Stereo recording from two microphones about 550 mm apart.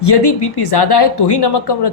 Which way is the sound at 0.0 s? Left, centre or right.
Left.